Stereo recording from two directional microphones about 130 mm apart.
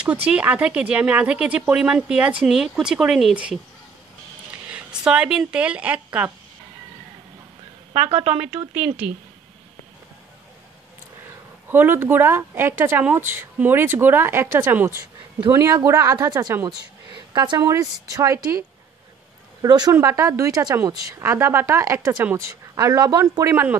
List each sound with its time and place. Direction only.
0.0 s speech: 10° right (ahead or behind)
8.2 s speech: 10° right (ahead or behind)
11.7 s a woman's voice: 15° right (ahead or behind)
16.6 s a woman's voice: 35° right (ahead or behind)
19.6 s a woman's voice: 30° right (ahead or behind)